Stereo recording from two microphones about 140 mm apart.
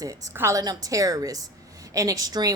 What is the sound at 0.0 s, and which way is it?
A woman's voice, 25° right (ahead or behind).